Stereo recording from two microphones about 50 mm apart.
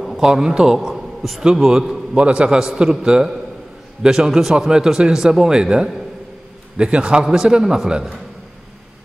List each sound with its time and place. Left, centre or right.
0.0 s a sound: centre
0.3 s a man's voice: centre
2.5 s speech: centre